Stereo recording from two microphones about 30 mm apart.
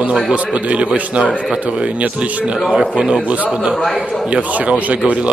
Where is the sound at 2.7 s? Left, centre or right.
Right.